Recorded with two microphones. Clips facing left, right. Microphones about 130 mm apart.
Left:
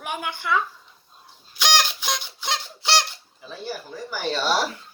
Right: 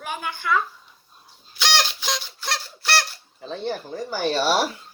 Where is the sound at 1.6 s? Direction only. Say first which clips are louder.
Left 1 dB; 15° left (ahead or behind).